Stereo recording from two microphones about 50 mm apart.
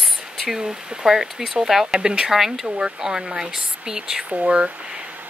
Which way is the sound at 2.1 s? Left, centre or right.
Centre.